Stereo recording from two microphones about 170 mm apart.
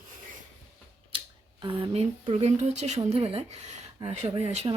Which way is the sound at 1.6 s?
35° right (ahead or behind).